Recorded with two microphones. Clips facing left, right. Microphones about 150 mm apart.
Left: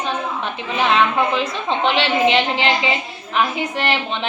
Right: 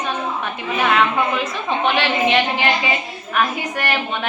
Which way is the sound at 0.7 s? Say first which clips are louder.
Left 1 dB; 25° left (ahead or behind).